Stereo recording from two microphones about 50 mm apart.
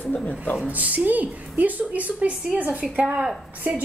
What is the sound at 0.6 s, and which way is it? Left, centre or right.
A woman's voice, right.